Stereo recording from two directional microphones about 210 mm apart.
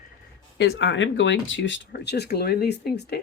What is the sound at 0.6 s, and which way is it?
Speech, 55° left (ahead or behind).